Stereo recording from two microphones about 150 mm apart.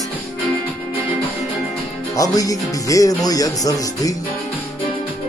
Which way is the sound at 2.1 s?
25° left (ahead or behind).